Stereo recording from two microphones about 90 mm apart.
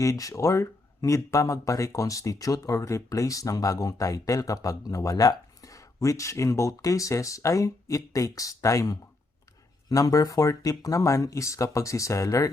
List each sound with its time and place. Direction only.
0.0 s speech: 40° left (ahead or behind)